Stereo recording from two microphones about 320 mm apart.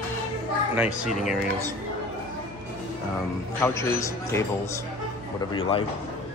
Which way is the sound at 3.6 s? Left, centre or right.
Centre.